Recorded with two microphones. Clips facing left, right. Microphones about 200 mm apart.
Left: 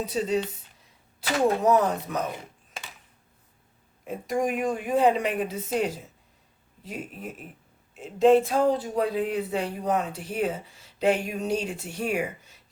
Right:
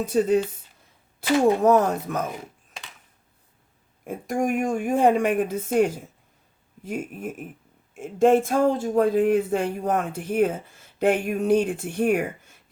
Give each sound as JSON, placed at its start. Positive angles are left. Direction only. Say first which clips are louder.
{"t": 0.0, "sound": "speech", "louder": "right 6 dB", "side_deg": -50}
{"t": 1.6, "sound": "speech", "louder": "right 3 dB", "side_deg": -50}
{"t": 4.0, "sound": "speech", "louder": "right 2 dB", "side_deg": -50}